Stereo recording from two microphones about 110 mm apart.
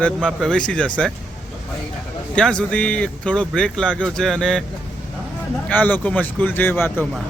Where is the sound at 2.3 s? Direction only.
10° left (ahead or behind).